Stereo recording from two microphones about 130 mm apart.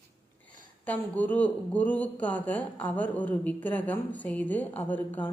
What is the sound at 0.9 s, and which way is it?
Speech, 10° left (ahead or behind).